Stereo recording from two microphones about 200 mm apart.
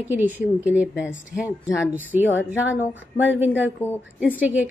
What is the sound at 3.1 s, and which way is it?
A woman's voice, 10° right (ahead or behind).